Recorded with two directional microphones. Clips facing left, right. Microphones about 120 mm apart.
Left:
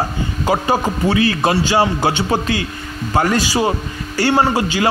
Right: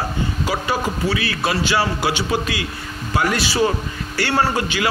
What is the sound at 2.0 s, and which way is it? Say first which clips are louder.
A man's voice: left 3 dB; 45° left (ahead or behind).